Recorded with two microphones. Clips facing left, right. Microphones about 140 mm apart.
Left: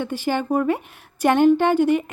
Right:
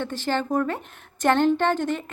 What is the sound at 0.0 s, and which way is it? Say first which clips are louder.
Speech: left 3 dB; 10° left (ahead or behind).